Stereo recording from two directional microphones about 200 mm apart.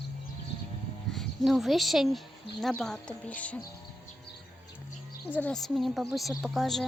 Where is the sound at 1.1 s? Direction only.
Centre (ahead or behind).